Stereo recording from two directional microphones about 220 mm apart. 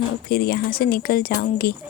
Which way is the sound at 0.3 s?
45° left (ahead or behind).